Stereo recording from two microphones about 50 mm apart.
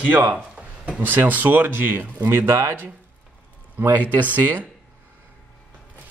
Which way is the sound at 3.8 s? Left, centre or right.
Right.